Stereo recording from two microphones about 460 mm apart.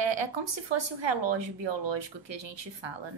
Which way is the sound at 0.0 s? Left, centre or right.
Right.